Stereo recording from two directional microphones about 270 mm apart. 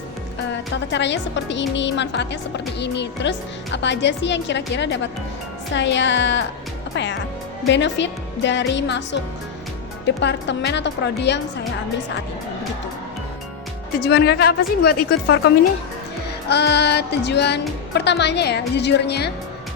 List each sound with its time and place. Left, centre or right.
0.9 s a woman's voice: left
14.0 s a woman's voice: left
16.5 s a woman's voice: left